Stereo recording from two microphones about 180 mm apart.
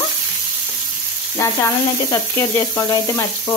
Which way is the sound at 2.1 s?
20° left (ahead or behind).